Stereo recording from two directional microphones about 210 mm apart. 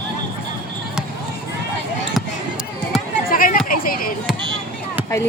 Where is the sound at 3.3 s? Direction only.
40° left (ahead or behind).